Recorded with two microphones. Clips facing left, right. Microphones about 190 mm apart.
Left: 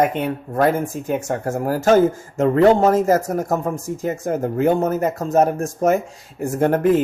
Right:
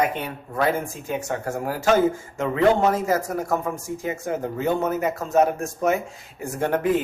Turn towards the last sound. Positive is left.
turn(degrees=45)  # may be behind; listen again after turning